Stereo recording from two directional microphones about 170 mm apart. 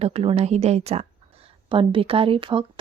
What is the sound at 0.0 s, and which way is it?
A woman's voice, 35° right (ahead or behind).